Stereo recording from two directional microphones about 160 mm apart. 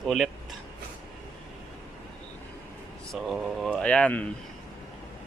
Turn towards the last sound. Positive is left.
turn(degrees=10)  # may be behind; listen again after turning